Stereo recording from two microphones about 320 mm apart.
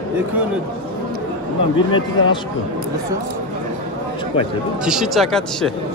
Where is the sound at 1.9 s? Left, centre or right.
Centre.